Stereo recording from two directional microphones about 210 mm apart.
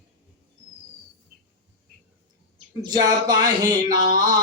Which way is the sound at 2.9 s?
20° right (ahead or behind).